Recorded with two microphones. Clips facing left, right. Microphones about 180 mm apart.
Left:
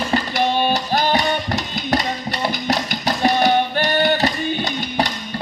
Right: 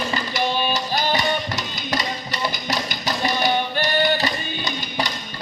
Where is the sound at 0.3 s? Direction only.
65° left (ahead or behind).